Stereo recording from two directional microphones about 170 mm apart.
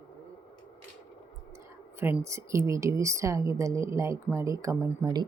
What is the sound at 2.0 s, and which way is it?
A woman's voice, 15° right (ahead or behind).